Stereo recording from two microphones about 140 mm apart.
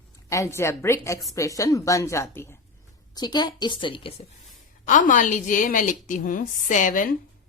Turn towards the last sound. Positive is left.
turn(degrees=70)  # may be behind; listen again after turning